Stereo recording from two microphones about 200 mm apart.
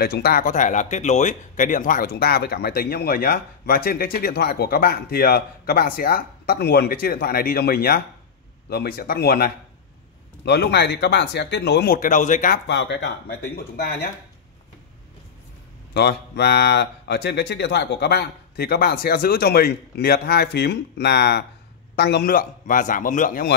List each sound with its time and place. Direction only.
0.0 s speech: 50° left (ahead or behind)
12.6 s speech: 60° left (ahead or behind)
15.9 s speech: 55° left (ahead or behind)